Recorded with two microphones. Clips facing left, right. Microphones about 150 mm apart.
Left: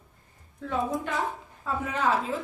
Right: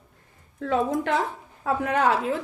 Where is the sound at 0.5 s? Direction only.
90° right.